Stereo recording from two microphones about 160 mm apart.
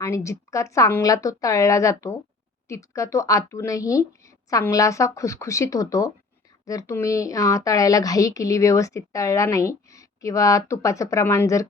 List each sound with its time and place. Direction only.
0.0 s a woman's voice: 20° left (ahead or behind)